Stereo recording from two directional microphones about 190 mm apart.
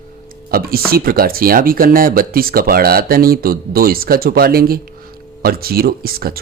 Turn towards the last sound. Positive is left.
turn(degrees=-55)  # may be behind; listen again after turning